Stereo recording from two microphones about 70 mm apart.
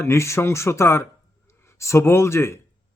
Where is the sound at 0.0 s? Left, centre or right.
Left.